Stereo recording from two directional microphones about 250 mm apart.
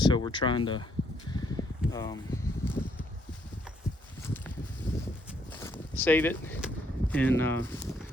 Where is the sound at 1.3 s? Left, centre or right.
Centre.